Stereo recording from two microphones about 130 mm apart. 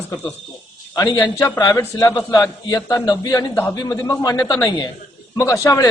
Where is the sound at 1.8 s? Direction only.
20° left (ahead or behind).